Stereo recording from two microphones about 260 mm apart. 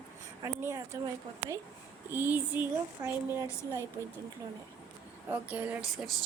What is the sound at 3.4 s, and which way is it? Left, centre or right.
Speech, centre.